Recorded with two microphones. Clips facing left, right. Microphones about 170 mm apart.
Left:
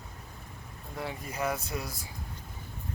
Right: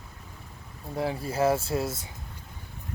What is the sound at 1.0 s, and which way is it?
Speech, 30° right (ahead or behind).